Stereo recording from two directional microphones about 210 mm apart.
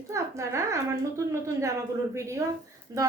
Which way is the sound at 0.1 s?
15° right (ahead or behind).